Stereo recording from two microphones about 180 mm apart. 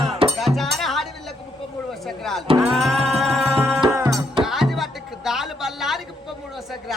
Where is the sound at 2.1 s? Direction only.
Centre (ahead or behind).